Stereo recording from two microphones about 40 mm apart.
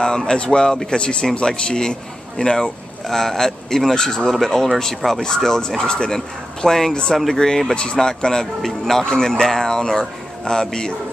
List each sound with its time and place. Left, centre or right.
0.0 s a man's voice: centre